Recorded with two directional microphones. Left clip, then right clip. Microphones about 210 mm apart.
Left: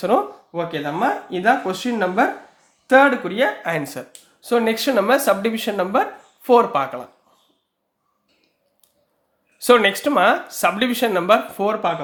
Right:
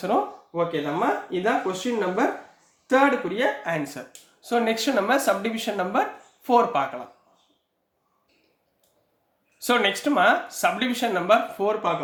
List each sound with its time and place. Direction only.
0.0 s speech: 45° left (ahead or behind)
9.6 s speech: 30° left (ahead or behind); by 11.9 s 45° left (ahead or behind)